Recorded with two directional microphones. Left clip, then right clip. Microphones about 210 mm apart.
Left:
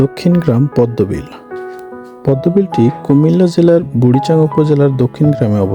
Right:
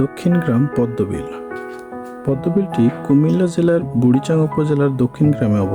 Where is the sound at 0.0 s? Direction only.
25° left (ahead or behind).